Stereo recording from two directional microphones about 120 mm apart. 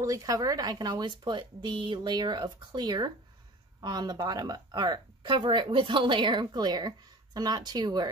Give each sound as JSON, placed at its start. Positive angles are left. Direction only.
{"t": 0.0, "sound": "speech", "side_deg": -30}